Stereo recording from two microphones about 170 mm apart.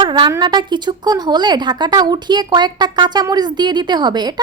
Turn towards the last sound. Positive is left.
turn(degrees=-25)  # may be behind; listen again after turning